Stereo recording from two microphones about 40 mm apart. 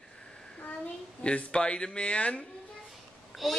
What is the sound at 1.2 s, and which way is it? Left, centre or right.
Speech, left.